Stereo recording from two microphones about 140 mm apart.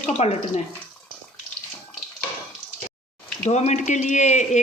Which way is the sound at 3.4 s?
55° left (ahead or behind).